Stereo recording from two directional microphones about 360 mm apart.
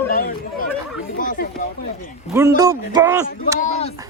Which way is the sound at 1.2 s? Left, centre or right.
Left.